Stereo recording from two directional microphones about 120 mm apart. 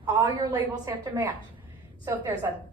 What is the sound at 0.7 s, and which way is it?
Speech, 25° right (ahead or behind).